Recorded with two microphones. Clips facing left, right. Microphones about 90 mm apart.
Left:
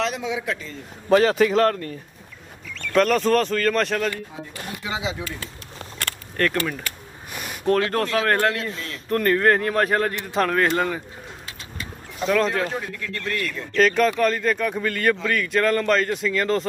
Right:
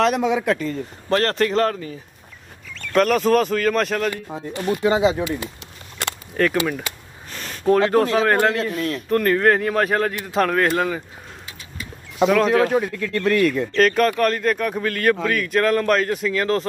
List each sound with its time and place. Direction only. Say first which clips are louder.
0.0 s speech: right 7 dB; 55° right (ahead or behind)
1.0 s speech: left 3 dB; 5° left (ahead or behind)
4.3 s speech: right 10 dB; 50° right (ahead or behind)
6.5 s speech: right 4 dB; 15° right (ahead or behind)
7.3 s a sound: even; 10° left (ahead or behind)
7.6 s speech: right 5 dB; 5° right (ahead or behind)
12.3 s speech: right 4 dB; 5° right (ahead or behind)
12.7 s speech: right 9 dB; 60° right (ahead or behind)
13.7 s speech: even; centre (ahead or behind)